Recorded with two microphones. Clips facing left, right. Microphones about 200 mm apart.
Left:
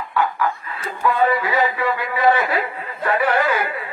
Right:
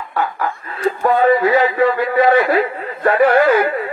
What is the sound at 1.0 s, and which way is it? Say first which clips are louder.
A man's voice: right 5 dB; 45° right (ahead or behind).